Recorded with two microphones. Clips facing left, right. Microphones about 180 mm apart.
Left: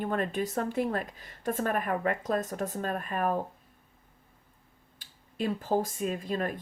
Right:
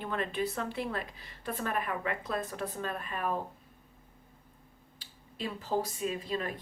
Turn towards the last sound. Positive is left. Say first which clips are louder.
# left 3 dB
turn(degrees=50)  # may be behind; listen again after turning